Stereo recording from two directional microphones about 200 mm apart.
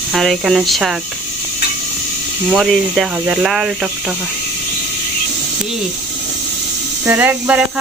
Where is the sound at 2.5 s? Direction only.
Centre (ahead or behind).